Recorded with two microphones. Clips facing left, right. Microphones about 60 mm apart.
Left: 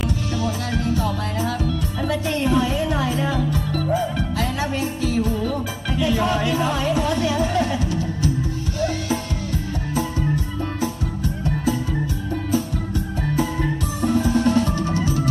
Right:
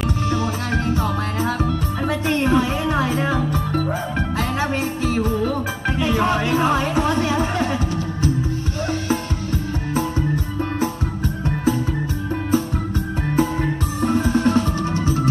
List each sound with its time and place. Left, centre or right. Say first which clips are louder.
0.3 s music: right 3 dB; right
9.9 s music: right 1 dB; right
13.4 s music: right 4 dB; right